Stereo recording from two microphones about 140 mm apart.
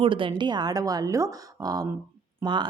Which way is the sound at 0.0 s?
40° right (ahead or behind).